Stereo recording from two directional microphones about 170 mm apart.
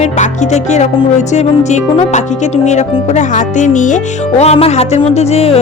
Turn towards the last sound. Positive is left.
turn(degrees=40)  # may be behind; listen again after turning